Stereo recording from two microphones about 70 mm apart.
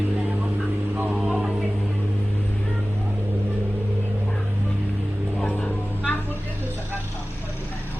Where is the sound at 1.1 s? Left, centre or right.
Centre.